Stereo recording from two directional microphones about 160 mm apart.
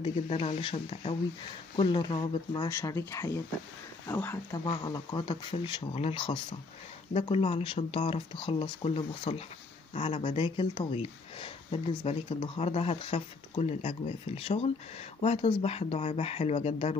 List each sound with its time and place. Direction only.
0.0 s speech: 40° left (ahead or behind)
2.7 s speech: 20° left (ahead or behind)
4.8 s speech: 25° left (ahead or behind)